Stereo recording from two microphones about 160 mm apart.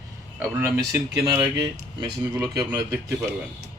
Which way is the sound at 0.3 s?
15° right (ahead or behind).